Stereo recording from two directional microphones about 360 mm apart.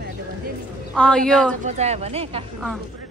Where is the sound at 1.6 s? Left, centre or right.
Centre.